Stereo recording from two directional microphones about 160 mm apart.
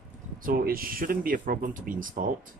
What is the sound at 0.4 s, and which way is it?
Speech, 65° right (ahead or behind).